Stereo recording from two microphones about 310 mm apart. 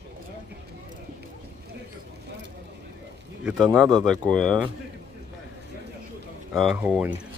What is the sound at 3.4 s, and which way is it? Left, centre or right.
Speech, centre.